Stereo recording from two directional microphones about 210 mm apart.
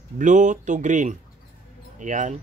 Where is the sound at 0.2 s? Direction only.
35° right (ahead or behind).